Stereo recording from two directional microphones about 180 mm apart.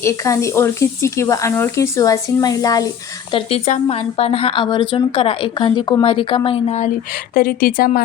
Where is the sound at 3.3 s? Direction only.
35° left (ahead or behind).